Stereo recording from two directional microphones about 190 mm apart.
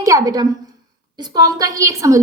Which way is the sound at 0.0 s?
15° right (ahead or behind).